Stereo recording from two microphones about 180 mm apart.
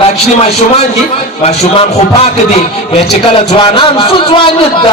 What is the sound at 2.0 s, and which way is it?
A man's voice, 35° left (ahead or behind).